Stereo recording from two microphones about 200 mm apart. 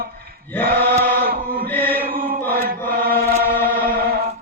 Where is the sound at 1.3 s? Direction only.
50° right (ahead or behind).